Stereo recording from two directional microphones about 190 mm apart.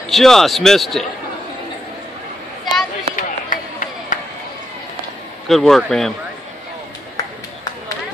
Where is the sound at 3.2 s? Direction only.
45° left (ahead or behind).